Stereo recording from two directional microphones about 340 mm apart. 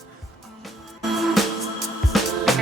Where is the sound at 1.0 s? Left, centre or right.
Centre.